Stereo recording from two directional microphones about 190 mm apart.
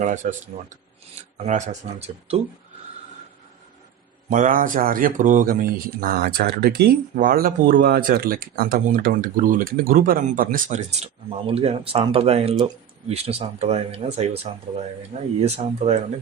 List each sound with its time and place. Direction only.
0.0 s speech: 40° right (ahead or behind)
1.4 s speech: 40° right (ahead or behind)
4.3 s speech: 45° right (ahead or behind)